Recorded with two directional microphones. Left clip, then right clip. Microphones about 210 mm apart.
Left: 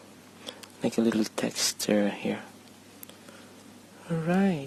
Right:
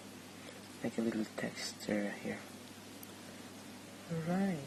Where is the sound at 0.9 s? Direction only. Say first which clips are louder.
Left 11 dB; 55° left (ahead or behind).